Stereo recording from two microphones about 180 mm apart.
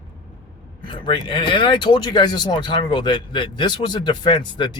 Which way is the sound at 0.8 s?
25° left (ahead or behind).